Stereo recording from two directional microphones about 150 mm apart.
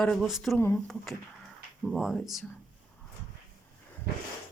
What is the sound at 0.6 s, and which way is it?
Speech, 10° left (ahead or behind).